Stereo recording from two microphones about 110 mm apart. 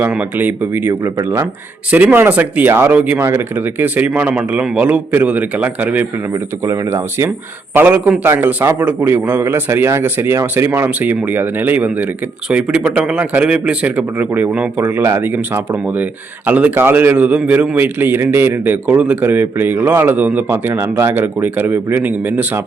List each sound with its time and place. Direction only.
0.0 s a man's voice: 15° right (ahead or behind)
6.7 s a man's voice: 25° right (ahead or behind)